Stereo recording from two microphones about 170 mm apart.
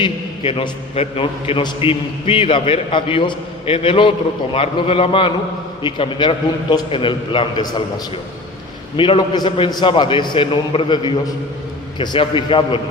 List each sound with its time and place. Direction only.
0.0 s a man's voice: 30° left (ahead or behind)